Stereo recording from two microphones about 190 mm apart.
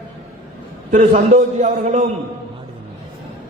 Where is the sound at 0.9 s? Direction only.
40° right (ahead or behind).